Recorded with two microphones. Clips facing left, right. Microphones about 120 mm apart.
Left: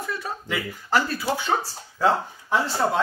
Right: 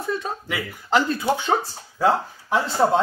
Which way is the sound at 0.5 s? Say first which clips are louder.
Right 2 dB; 15° right (ahead or behind).